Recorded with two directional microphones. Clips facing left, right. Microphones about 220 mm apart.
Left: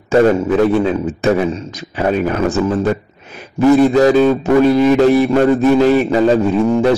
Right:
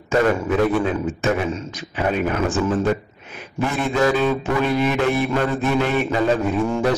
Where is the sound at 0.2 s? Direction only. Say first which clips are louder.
Left 6 dB; 30° left (ahead or behind).